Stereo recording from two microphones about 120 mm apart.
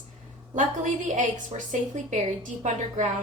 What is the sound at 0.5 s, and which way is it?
A woman's voice, 90° right.